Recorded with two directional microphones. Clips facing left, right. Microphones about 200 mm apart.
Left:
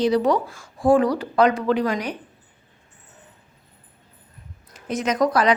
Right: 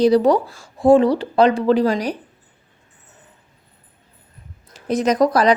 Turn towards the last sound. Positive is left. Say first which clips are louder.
# right 4 dB
turn(degrees=-35)  # may be behind; listen again after turning